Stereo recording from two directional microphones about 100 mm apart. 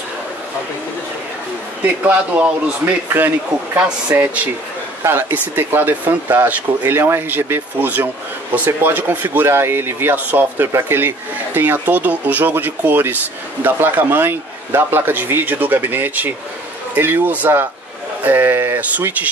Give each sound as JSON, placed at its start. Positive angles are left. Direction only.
{"t": 2.0, "sound": "speech", "side_deg": -15}